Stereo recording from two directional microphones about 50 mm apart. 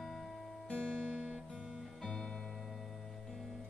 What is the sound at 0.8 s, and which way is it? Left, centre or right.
Music, centre.